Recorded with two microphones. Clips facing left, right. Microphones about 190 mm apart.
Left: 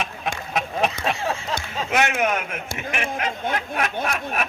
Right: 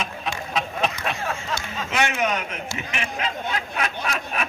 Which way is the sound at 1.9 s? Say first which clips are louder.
Left 2 dB; 55° left (ahead or behind).